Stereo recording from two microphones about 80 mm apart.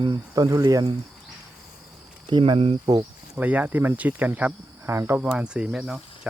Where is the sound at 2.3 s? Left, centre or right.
Right.